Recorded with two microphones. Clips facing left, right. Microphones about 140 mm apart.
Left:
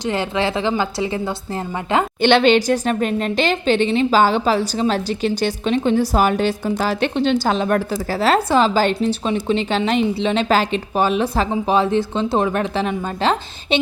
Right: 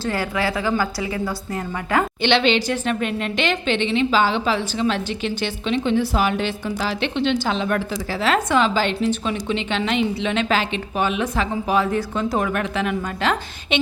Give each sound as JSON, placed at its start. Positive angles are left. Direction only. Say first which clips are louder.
{"t": 0.0, "sound": "a woman's voice", "louder": "left 3 dB", "side_deg": 20}
{"t": 2.2, "sound": "a woman's voice", "louder": "left 7 dB", "side_deg": 45}